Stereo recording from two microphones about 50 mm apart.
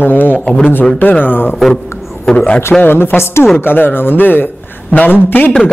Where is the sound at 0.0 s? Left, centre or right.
Left.